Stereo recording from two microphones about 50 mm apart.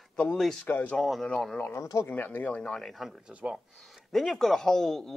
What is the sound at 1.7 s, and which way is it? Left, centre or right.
Speech, left.